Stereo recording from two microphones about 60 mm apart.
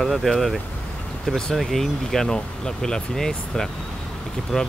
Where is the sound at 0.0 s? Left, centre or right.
Centre.